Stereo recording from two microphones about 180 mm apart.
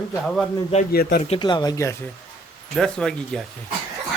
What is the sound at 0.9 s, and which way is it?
Speech, 60° left (ahead or behind).